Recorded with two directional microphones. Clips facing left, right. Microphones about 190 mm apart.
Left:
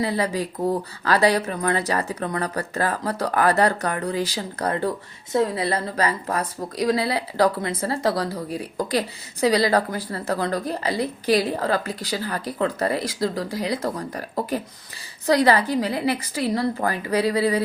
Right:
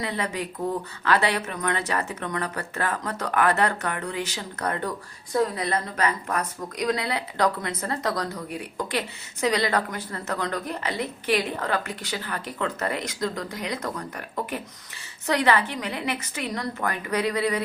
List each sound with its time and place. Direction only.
0.0 s a woman's voice: 35° left (ahead or behind)